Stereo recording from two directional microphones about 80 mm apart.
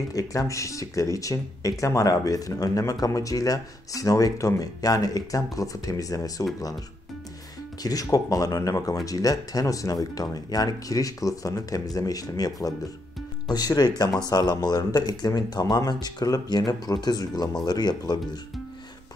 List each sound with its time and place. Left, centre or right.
0.1 s speech: left
7.8 s speech: left